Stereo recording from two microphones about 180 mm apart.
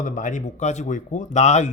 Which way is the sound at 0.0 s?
45° left (ahead or behind).